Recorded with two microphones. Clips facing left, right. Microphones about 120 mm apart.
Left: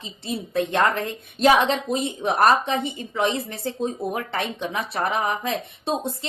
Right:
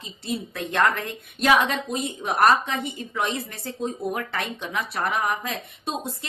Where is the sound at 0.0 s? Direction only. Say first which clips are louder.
Even; 25° left (ahead or behind).